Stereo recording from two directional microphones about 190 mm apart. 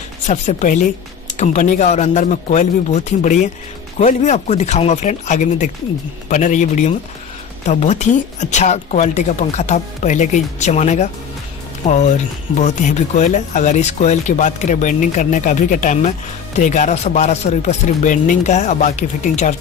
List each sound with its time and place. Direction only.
0.3 s speech: 40° left (ahead or behind)